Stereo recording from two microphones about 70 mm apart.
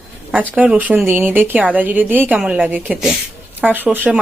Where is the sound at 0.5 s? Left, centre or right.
Right.